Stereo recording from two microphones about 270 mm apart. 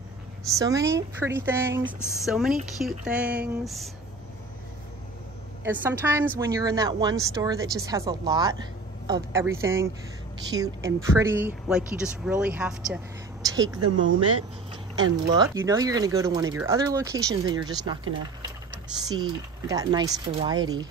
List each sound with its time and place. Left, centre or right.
0.5 s speech: centre
5.6 s speech: centre
13.4 s a sound: centre
13.8 s speech: right
15.6 s speech: centre